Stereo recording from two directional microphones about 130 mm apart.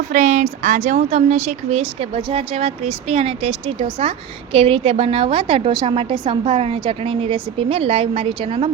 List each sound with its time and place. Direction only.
0.1 s a woman's voice: 80° right; by 8.7 s 45° right (ahead or behind)